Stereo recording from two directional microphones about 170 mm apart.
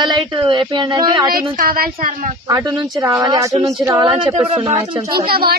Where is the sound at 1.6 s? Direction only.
60° right (ahead or behind).